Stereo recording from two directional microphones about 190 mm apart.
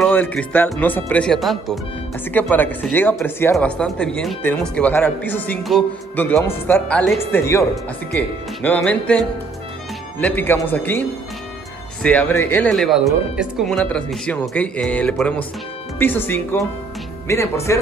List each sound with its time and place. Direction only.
0.0 s speech: 5° left (ahead or behind)
8.6 s speech: 10° left (ahead or behind)
10.2 s speech: 10° left (ahead or behind)